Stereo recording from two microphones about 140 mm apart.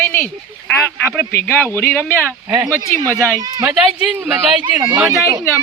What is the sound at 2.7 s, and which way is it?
Speech, 20° right (ahead or behind).